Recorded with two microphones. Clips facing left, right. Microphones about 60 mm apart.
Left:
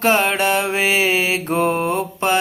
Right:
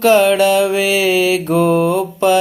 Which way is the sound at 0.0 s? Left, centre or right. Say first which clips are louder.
Right 6 dB; left.